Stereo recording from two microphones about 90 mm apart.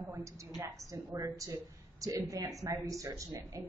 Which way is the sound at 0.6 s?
35° right (ahead or behind).